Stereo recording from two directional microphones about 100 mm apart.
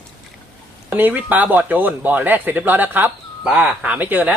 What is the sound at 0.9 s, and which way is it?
Speech, 15° right (ahead or behind).